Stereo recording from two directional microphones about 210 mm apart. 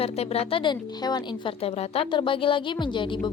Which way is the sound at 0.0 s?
30° left (ahead or behind).